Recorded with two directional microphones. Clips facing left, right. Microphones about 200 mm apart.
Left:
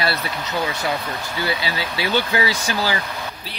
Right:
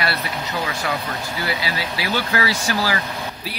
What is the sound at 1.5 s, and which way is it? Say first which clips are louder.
Speech: left 1 dB; 25° left (ahead or behind).